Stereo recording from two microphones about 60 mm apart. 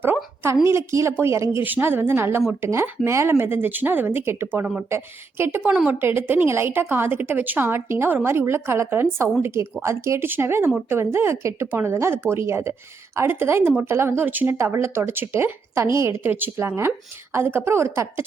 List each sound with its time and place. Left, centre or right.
0.6 s speech: right
1.6 s a woman's voice: right
10.2 s a woman's voice: right
14.6 s speech: right